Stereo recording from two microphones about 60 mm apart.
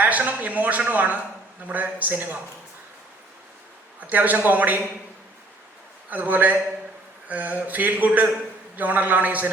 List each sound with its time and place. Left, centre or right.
0.0 s speech: right
4.0 s speech: right
6.1 s speech: right